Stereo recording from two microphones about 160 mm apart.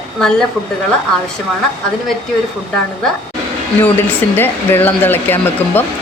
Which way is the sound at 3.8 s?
10° left (ahead or behind).